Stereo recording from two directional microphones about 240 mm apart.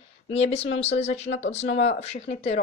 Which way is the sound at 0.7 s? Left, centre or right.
Left.